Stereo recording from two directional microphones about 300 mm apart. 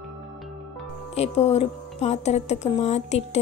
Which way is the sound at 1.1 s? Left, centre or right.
Left.